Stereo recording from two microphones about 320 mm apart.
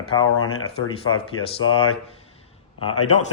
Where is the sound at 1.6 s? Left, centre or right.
Left.